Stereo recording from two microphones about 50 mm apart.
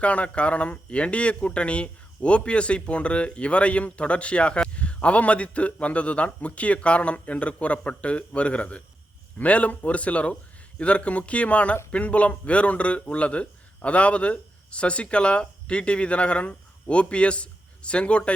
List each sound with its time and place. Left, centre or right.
0.0 s a man's voice: left